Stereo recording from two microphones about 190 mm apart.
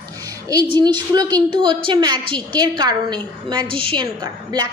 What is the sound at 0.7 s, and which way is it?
A woman's voice, 25° right (ahead or behind).